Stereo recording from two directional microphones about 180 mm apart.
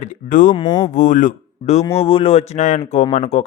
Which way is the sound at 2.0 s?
30° left (ahead or behind).